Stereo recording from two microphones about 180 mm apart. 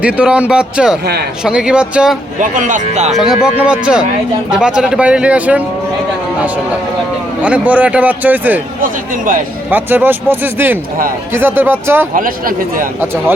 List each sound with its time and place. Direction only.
0.0 s speech: 5° right (ahead or behind)
2.4 s speech: 45° right (ahead or behind)
3.4 s speech: 5° right (ahead or behind)
7.4 s speech: 10° right (ahead or behind)
8.8 s speech: 50° right (ahead or behind)
9.6 s speech: 10° right (ahead or behind)
12.1 s speech: 50° right (ahead or behind)